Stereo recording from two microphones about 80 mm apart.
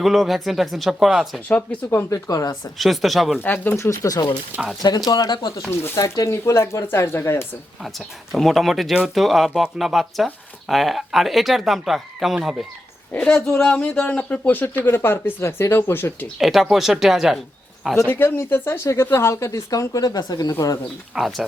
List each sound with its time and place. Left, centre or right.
0.0 s speech: centre
2.0 s speech: left
2.7 s speech: centre
3.4 s speech: left
3.8 s speech: left
6.0 s speech: left
7.9 s speech: centre
13.1 s speech: centre
16.4 s speech: centre
17.9 s speech: left
20.5 s speech: left
21.2 s speech: centre